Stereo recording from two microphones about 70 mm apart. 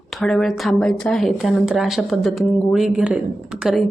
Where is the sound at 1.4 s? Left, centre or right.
Centre.